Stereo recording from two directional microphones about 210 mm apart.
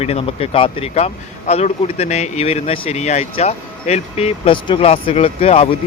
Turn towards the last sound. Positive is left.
turn(degrees=25)  # may be behind; listen again after turning